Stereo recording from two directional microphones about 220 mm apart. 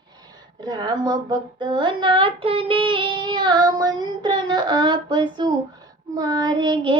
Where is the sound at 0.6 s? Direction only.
20° right (ahead or behind).